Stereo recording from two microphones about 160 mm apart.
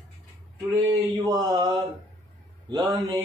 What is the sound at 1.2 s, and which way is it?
Speech, 25° right (ahead or behind).